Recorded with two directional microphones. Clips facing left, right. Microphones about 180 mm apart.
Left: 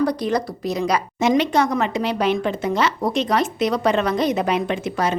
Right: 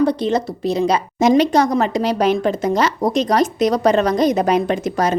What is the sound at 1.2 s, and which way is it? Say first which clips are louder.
Speech: right 5 dB; 40° right (ahead or behind).